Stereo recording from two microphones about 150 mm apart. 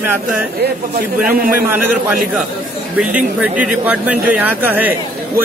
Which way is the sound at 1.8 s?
10° right (ahead or behind).